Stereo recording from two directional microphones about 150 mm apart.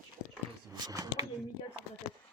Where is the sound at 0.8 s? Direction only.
25° right (ahead or behind).